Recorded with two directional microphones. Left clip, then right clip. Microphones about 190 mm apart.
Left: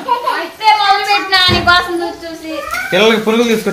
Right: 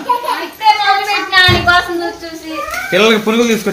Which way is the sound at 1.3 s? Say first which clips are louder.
Right 2 dB; 35° left (ahead or behind).